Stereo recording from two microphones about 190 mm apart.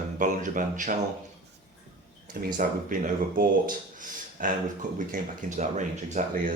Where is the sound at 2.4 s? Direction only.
45° right (ahead or behind).